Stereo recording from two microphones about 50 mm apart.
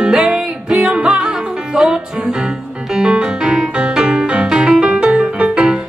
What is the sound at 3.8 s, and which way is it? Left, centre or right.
Music, centre.